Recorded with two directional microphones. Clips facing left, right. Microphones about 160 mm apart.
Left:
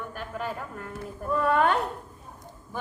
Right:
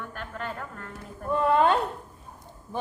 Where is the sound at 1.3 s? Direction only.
25° right (ahead or behind).